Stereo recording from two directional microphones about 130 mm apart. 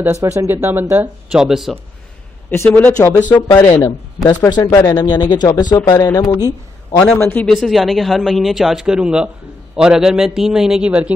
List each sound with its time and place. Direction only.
0.0 s speech: 20° right (ahead or behind)
1.3 s speech: 5° right (ahead or behind)
2.5 s speech: 20° left (ahead or behind)
7.2 s speech: 20° left (ahead or behind)
7.4 s speech: centre (ahead or behind)